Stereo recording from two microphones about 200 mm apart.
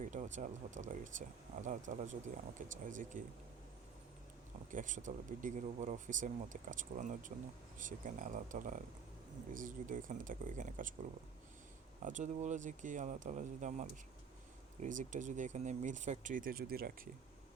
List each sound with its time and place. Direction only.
0.0 s speech: 35° right (ahead or behind)
4.7 s speech: 40° right (ahead or behind)
12.0 s speech: 35° right (ahead or behind)